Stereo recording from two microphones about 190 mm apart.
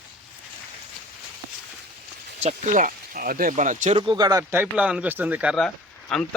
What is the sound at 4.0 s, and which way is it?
Speech, 25° right (ahead or behind).